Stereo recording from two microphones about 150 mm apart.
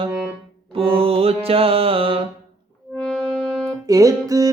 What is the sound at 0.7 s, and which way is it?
Music, 35° right (ahead or behind).